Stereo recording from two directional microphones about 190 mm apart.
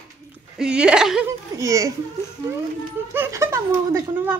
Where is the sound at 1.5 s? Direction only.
15° right (ahead or behind).